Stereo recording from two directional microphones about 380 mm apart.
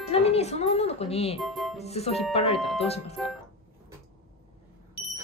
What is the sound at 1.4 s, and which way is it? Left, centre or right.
Speech, centre.